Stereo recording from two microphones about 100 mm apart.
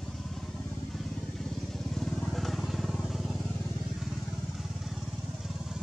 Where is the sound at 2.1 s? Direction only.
5° left (ahead or behind).